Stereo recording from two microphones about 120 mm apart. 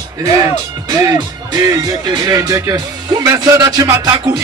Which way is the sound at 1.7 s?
35° right (ahead or behind).